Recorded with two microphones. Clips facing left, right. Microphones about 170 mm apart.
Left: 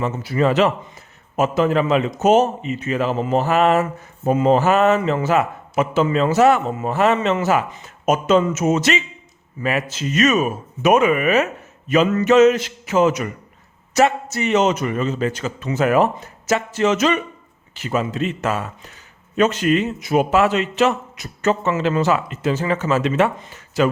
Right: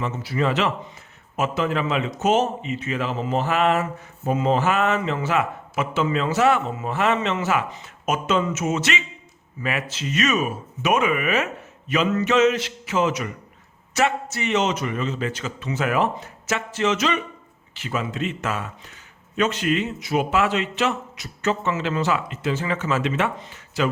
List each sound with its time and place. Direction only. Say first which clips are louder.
0.0 s a man's voice: left 5 dB; 45° left (ahead or behind)